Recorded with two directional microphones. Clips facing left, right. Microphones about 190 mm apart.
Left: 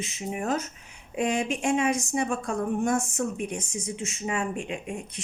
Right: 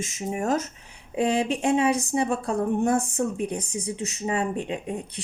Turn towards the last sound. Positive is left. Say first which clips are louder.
# right 3 dB
turn(degrees=-35)  # may be behind; listen again after turning